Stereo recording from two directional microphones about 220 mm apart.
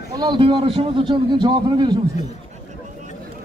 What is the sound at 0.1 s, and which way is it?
A man's voice, 20° right (ahead or behind).